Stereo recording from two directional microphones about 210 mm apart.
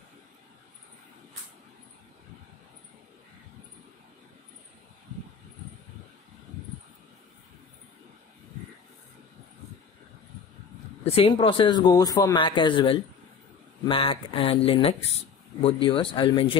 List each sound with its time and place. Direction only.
11.1 s speech: 25° left (ahead or behind)